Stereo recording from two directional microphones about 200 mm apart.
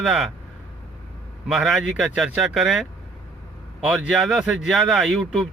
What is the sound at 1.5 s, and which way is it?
Speech, centre (ahead or behind).